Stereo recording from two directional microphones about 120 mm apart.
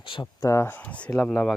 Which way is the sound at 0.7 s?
10° left (ahead or behind).